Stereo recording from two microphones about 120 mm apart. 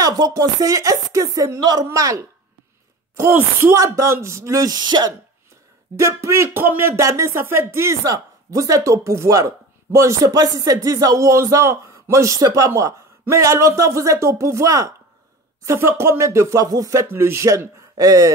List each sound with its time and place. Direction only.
0.0 s music: 30° right (ahead or behind)
1.9 s speech: 25° right (ahead or behind)
5.9 s speech: 25° right (ahead or behind)